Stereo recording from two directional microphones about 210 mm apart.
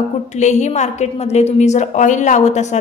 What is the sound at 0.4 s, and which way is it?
A woman's voice, 35° left (ahead or behind).